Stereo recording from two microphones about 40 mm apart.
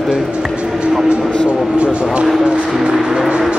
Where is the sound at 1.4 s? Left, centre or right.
Right.